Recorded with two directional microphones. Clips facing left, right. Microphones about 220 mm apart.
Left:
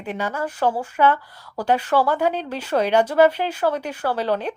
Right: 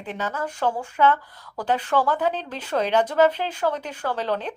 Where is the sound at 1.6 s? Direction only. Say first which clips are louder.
Left 3 dB; 10° left (ahead or behind).